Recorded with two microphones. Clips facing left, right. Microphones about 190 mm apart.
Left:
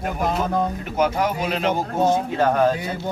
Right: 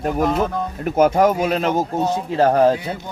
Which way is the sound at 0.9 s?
45° right (ahead or behind).